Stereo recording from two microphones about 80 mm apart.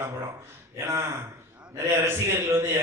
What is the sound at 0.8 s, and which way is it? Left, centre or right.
A man's voice, right.